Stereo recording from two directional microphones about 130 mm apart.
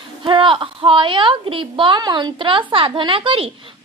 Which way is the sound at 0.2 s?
40° right (ahead or behind).